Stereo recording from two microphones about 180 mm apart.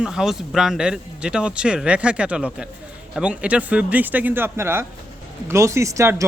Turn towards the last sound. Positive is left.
turn(degrees=-15)  # may be behind; listen again after turning